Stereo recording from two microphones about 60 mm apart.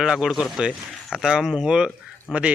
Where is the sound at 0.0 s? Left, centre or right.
Centre.